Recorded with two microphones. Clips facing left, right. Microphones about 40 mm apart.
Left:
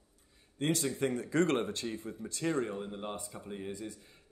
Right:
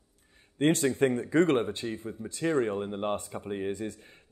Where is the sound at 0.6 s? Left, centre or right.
Right.